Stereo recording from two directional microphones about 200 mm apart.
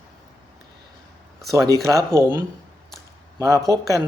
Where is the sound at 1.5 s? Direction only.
15° right (ahead or behind).